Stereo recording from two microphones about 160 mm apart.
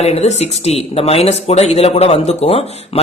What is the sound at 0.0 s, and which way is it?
Speech, 40° left (ahead or behind).